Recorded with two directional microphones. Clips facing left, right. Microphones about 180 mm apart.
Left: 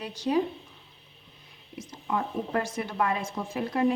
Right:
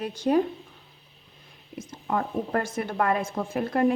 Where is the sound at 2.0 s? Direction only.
50° right (ahead or behind).